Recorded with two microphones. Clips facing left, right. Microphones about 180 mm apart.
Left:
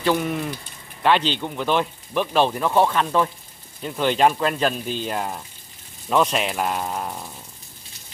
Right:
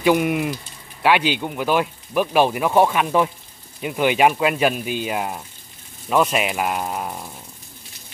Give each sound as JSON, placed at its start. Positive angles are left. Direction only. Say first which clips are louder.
{"t": 0.0, "sound": "speech", "louder": "right 4 dB", "side_deg": -10}